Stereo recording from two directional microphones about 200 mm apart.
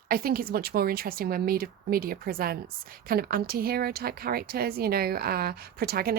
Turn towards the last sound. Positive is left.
turn(degrees=-50)  # may be behind; listen again after turning